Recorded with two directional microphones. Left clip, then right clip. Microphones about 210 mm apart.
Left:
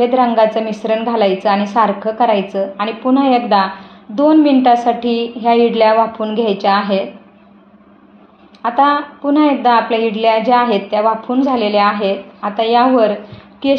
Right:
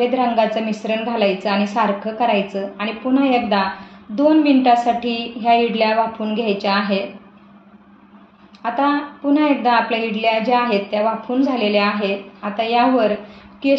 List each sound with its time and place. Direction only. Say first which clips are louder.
0.0 s a woman's voice: left 5 dB; 35° left (ahead or behind)
8.6 s a woman's voice: left 6 dB; 35° left (ahead or behind)